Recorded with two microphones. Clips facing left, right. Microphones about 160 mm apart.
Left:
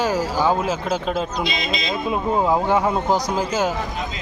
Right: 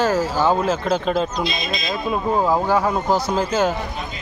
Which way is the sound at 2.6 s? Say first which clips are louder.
Even; 25° left (ahead or behind).